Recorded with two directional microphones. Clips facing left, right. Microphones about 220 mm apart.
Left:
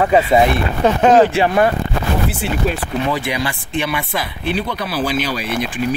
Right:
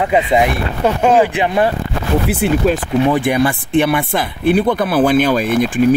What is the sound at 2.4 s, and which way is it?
Speech, 55° right (ahead or behind).